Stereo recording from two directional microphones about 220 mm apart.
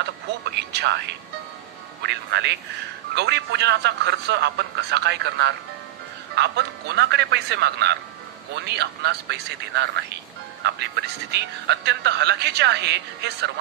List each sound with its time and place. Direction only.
0.7 s speech: 50° right (ahead or behind)
2.0 s speech: 50° right (ahead or behind)